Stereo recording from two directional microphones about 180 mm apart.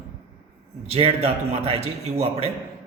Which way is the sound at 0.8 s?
35° right (ahead or behind).